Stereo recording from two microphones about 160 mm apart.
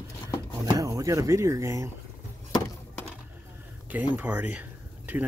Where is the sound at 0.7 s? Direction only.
20° right (ahead or behind).